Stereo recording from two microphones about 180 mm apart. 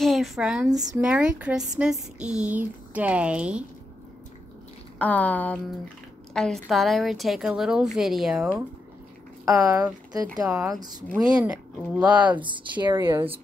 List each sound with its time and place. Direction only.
0.0 s speech: centre (ahead or behind)
0.7 s speech: 20° right (ahead or behind)
1.0 s speech: 5° right (ahead or behind)
4.9 s a woman's voice: 10° left (ahead or behind)
9.4 s speech: 15° right (ahead or behind)
11.4 s speech: 5° right (ahead or behind)
12.4 s speech: 25° right (ahead or behind)